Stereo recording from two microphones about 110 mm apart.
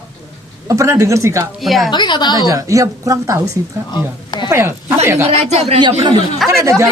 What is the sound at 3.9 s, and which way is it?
Speech, 40° left (ahead or behind).